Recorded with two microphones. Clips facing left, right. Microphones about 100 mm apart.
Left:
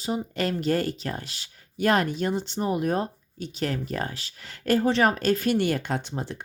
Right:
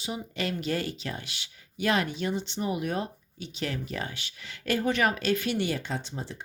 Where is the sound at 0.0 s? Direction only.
40° left (ahead or behind).